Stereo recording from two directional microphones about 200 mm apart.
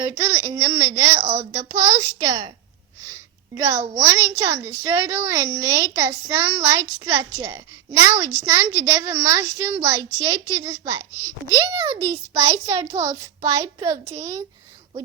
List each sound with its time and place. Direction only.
0.0 s a woman's voice: 15° right (ahead or behind)
1.2 s a child's voice: 35° right (ahead or behind)
1.5 s a woman's voice: 15° right (ahead or behind)
2.2 s a woman's voice: 30° right (ahead or behind)
3.1 s a woman's voice: 15° right (ahead or behind)